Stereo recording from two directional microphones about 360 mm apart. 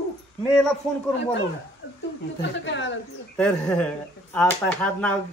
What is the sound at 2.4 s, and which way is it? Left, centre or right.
Speech, left.